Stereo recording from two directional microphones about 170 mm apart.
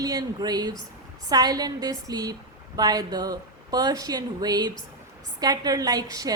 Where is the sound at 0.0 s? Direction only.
25° right (ahead or behind).